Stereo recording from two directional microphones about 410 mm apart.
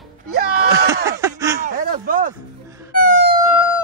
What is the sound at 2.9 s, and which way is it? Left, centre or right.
Wail, centre.